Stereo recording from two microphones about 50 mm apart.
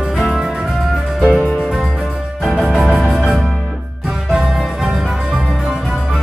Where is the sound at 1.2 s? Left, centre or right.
Left.